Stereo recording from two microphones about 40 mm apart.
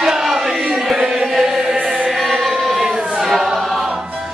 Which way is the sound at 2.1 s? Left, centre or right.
Centre.